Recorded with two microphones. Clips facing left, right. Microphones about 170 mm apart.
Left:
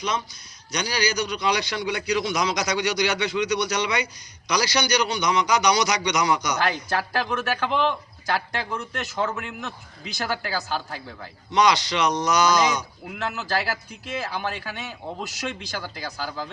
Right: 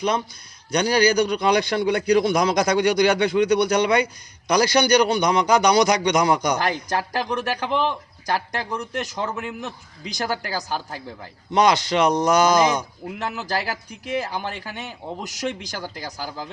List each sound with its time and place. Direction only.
0.7 s a man's voice: 50° right (ahead or behind)
6.9 s speech: 15° right (ahead or behind)
11.5 s a man's voice: 50° right (ahead or behind)
13.4 s speech: 15° right (ahead or behind)